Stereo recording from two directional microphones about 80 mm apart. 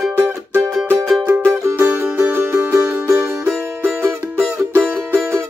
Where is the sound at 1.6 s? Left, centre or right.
Right.